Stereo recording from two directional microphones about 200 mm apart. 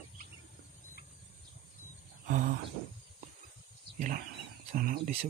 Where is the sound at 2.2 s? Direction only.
40° right (ahead or behind).